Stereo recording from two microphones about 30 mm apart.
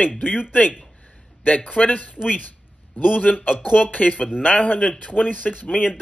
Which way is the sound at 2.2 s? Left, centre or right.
Left.